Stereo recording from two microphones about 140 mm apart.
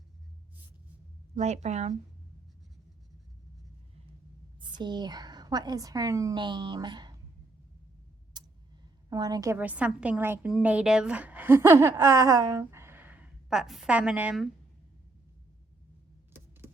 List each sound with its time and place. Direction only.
1.4 s a woman's voice: 55° right (ahead or behind)
4.6 s speech: 30° right (ahead or behind)
8.4 s tick: 30° right (ahead or behind)
9.0 s a woman's voice: 25° right (ahead or behind)
9.6 s a woman's voice: 10° right (ahead or behind)